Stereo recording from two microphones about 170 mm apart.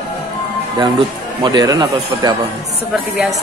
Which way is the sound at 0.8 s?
25° right (ahead or behind).